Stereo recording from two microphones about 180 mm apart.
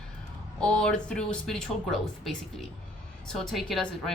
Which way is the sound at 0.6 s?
5° left (ahead or behind).